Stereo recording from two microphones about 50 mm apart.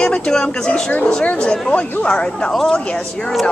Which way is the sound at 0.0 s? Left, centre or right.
Centre.